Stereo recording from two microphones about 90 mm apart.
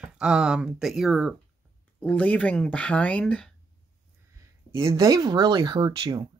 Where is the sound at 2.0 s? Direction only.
15° left (ahead or behind).